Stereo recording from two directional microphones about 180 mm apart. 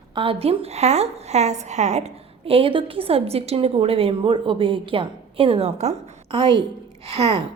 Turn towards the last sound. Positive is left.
turn(degrees=-35)  # may be behind; listen again after turning